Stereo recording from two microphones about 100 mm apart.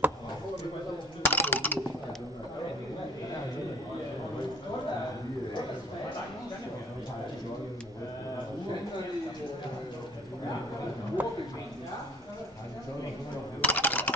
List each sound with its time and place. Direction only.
1.2 s typing: 20° left (ahead or behind)
11.2 s a sound: 20° right (ahead or behind)
13.6 s typing: 20° left (ahead or behind)